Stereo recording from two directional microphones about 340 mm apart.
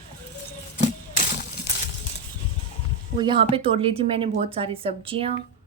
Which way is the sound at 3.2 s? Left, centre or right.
Centre.